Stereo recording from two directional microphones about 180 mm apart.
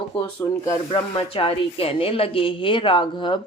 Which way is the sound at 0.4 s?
20° left (ahead or behind).